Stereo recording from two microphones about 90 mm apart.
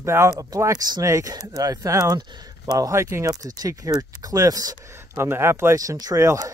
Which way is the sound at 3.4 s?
40° right (ahead or behind).